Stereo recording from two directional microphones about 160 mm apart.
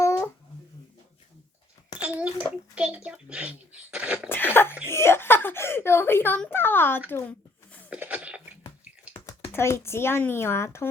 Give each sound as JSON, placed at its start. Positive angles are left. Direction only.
{"t": 0.0, "sound": "babbling", "side_deg": 20}
{"t": 2.0, "sound": "a child's voice", "side_deg": -10}
{"t": 4.3, "sound": "speech", "side_deg": 15}
{"t": 7.1, "sound": "a sound", "side_deg": 10}
{"t": 7.9, "sound": "a sound", "side_deg": -5}
{"t": 9.2, "sound": "speech", "side_deg": 15}